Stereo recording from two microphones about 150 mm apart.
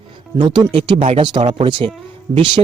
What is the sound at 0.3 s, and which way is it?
Speech, 30° right (ahead or behind).